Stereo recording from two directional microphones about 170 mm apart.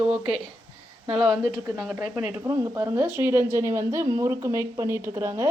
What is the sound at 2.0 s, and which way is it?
A woman's voice, 5° right (ahead or behind).